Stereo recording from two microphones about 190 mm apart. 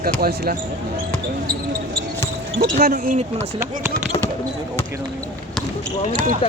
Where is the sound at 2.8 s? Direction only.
50° right (ahead or behind).